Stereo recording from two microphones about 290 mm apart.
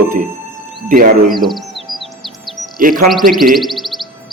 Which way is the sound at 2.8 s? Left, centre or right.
Right.